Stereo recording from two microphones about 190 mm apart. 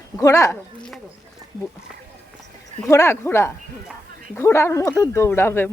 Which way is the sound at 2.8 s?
15° left (ahead or behind).